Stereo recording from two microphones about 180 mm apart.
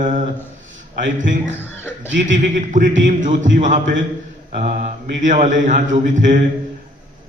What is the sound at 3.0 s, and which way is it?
Speech, 45° right (ahead or behind).